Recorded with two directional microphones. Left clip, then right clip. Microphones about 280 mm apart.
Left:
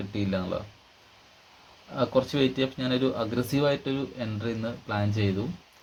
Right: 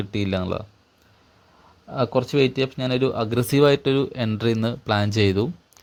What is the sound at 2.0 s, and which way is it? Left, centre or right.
Speech, right.